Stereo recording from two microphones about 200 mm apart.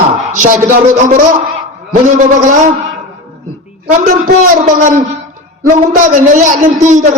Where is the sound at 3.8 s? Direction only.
40° right (ahead or behind).